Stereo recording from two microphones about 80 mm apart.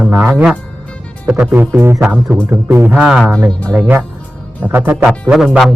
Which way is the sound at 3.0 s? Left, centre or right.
Centre.